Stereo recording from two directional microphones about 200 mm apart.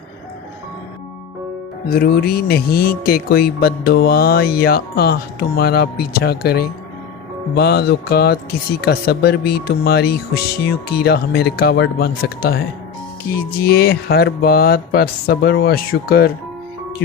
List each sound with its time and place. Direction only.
1.9 s speech: 50° left (ahead or behind)
7.5 s music: 55° left (ahead or behind)
8.8 s speech: 55° left (ahead or behind)